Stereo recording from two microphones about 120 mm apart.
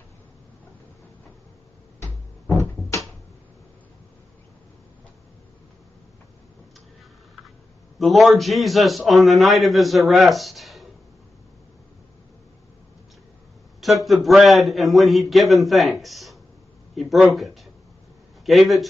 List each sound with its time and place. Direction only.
2.6 s cupboard open or close: 25° left (ahead or behind)
8.0 s a man's voice: centre (ahead or behind)
13.7 s a man's voice: centre (ahead or behind)